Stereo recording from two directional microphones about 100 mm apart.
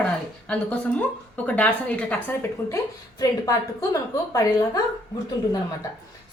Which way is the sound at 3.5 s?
35° left (ahead or behind).